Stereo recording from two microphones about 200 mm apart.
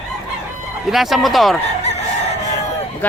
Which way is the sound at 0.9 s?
Centre (ahead or behind).